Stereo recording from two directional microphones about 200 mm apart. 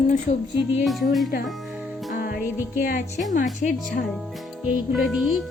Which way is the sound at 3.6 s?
40° left (ahead or behind).